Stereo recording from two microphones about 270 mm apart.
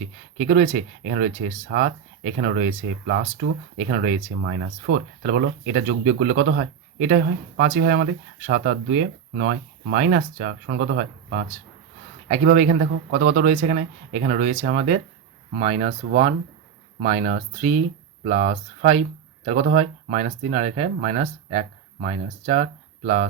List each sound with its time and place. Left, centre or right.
0.3 s speech: right